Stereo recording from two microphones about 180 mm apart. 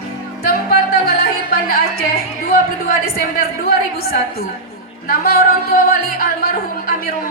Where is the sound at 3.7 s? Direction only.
60° left (ahead or behind).